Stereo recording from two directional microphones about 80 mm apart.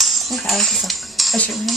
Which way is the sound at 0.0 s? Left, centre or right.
Centre.